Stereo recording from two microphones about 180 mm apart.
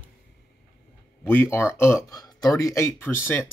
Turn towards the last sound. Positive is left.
turn(degrees=15)  # may be behind; listen again after turning